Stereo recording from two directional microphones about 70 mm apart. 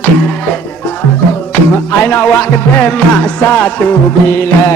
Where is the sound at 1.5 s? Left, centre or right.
Left.